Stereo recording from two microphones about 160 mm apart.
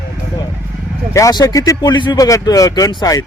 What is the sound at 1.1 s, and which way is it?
Speech, 20° left (ahead or behind).